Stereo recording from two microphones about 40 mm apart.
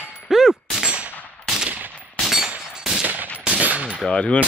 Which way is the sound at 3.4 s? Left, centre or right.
Right.